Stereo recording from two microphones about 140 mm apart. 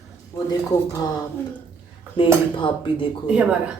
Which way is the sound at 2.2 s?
40° left (ahead or behind).